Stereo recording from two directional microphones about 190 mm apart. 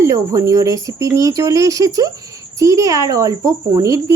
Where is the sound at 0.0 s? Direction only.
15° right (ahead or behind).